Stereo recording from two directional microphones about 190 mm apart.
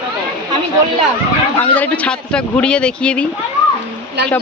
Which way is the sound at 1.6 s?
10° left (ahead or behind).